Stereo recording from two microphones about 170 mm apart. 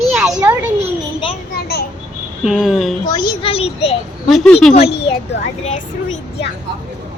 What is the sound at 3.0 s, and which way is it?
Speech, 25° left (ahead or behind).